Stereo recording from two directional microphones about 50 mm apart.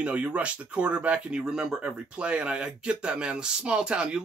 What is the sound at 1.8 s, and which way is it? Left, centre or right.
Speech, right.